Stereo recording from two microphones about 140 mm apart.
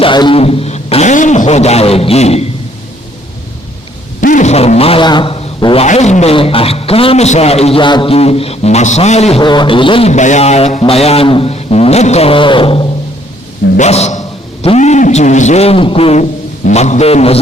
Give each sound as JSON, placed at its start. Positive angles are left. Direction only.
{"t": 0.0, "sound": "speech", "side_deg": 35}
{"t": 4.2, "sound": "speech", "side_deg": 65}
{"t": 5.8, "sound": "speech", "side_deg": 55}
{"t": 6.3, "sound": "speech", "side_deg": 40}
{"t": 9.4, "sound": "a sound", "side_deg": 35}
{"t": 10.1, "sound": "speech", "side_deg": 55}
{"t": 13.7, "sound": "speech", "side_deg": 50}